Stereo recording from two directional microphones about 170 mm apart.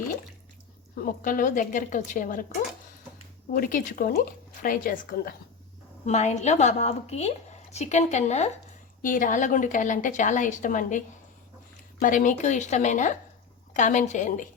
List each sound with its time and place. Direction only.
0.9 s a woman's voice: 55° left (ahead or behind)
6.1 s a woman's voice: 40° left (ahead or behind)